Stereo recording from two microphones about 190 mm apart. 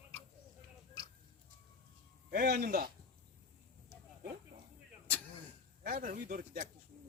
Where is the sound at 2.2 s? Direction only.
55° right (ahead or behind).